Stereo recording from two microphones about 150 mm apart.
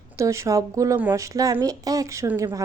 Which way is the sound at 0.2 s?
20° right (ahead or behind).